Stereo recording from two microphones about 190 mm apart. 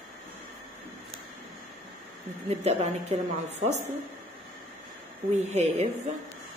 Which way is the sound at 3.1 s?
35° right (ahead or behind).